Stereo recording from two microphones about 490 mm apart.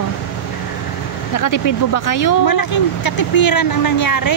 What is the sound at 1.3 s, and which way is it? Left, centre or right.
Speech, left.